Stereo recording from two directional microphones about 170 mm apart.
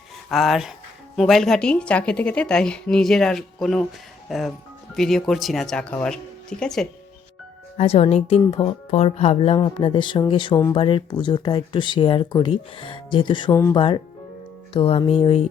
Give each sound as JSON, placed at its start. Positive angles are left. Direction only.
{"t": 0.3, "sound": "a woman's voice", "side_deg": 0}
{"t": 7.8, "sound": "speech", "side_deg": 35}
{"t": 13.5, "sound": "speech", "side_deg": 15}
{"t": 13.7, "sound": "speech", "side_deg": 30}